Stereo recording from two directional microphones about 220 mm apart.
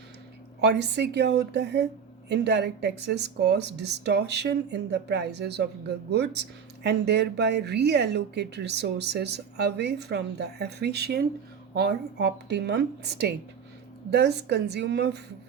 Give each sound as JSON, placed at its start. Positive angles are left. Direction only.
{"t": 0.6, "sound": "speech", "side_deg": -50}